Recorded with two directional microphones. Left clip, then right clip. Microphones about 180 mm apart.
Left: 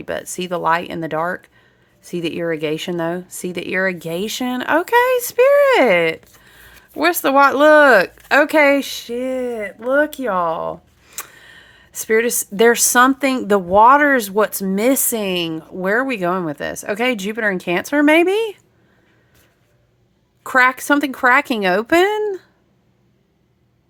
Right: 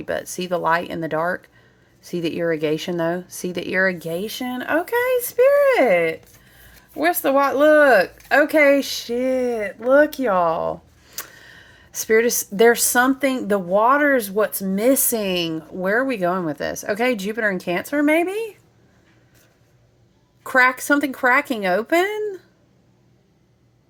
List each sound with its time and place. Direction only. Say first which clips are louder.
0.0 s speech: left 1 dB; 10° left (ahead or behind)
17.9 s speech: left 6 dB; 25° left (ahead or behind)
20.4 s speech: left 2 dB; 10° left (ahead or behind)